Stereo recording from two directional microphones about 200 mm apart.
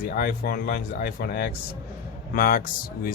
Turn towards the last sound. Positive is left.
turn(degrees=45)  # may be behind; listen again after turning